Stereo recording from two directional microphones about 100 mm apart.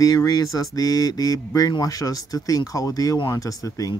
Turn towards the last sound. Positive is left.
turn(degrees=35)  # may be behind; listen again after turning